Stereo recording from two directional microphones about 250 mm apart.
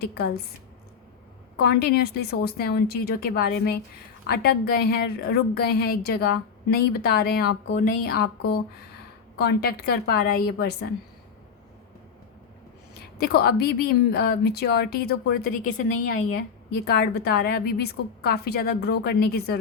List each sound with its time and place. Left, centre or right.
0.0 s a woman's voice: left
1.5 s a woman's voice: left
9.4 s a woman's voice: left
13.1 s a woman's voice: left
16.8 s a woman's voice: left